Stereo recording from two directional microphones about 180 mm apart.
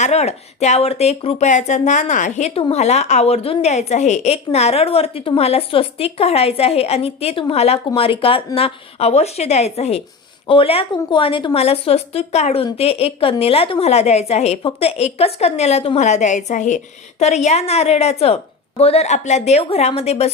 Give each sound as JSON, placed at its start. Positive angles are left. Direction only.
{"t": 0.0, "sound": "speech", "side_deg": 35}